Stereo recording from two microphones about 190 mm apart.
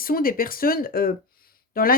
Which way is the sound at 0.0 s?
50° left (ahead or behind).